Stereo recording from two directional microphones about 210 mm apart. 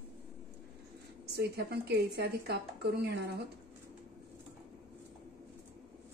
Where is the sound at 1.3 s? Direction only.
50° right (ahead or behind).